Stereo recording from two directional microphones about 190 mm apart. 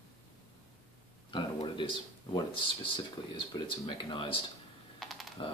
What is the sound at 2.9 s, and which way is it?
Speech, 25° left (ahead or behind).